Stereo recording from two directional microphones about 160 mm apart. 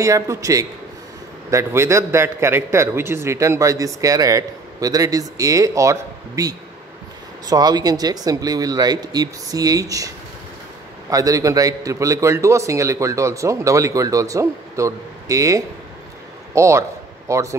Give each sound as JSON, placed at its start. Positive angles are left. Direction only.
{"t": 0.0, "sound": "a man's voice", "side_deg": -20}